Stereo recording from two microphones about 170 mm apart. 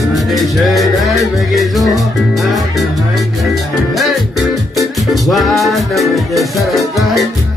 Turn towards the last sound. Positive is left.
turn(degrees=0)  # may be behind; listen again after turning